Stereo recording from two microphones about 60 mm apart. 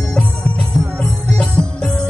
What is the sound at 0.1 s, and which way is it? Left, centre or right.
Music, centre.